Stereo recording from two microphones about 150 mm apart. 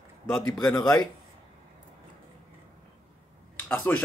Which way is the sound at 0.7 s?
20° left (ahead or behind).